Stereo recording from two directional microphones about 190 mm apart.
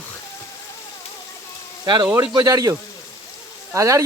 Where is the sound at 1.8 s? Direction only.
20° right (ahead or behind).